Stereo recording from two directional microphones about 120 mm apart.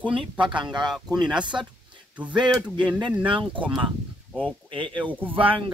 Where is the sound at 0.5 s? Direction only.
40° right (ahead or behind).